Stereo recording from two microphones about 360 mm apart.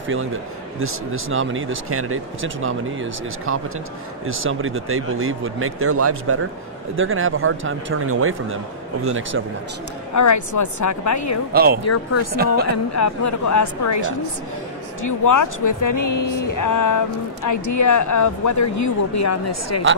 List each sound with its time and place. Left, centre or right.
0.7 s speech: right
10.1 s a woman's voice: left
11.5 s speech: right
11.8 s a woman's voice: left